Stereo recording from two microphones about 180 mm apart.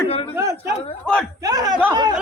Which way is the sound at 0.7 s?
35° left (ahead or behind).